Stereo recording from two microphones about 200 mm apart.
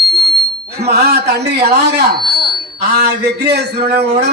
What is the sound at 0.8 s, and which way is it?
A man's voice, 55° right (ahead or behind).